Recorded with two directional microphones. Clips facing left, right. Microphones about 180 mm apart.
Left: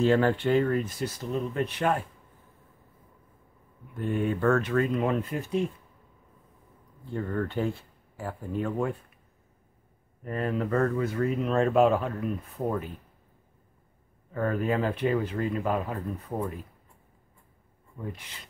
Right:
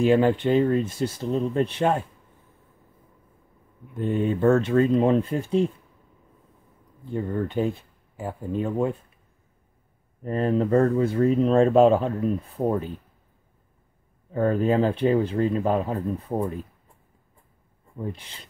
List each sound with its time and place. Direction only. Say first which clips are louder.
0.0 s speech: right 4 dB; 15° right (ahead or behind)
3.9 s speech: right 4 dB; 20° right (ahead or behind)
7.1 s speech: right 3 dB; 15° right (ahead or behind)
10.2 s speech: right 6 dB; 30° right (ahead or behind)
14.3 s speech: right 6 dB; 30° right (ahead or behind)
17.9 s speech: right 5 dB; 30° right (ahead or behind)